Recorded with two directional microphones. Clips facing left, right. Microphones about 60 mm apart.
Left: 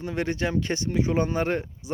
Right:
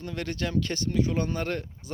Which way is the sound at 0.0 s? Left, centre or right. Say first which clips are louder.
Left 5 dB; left.